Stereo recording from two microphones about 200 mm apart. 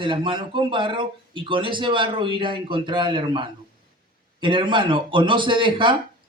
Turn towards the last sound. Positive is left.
turn(degrees=-25)  # may be behind; listen again after turning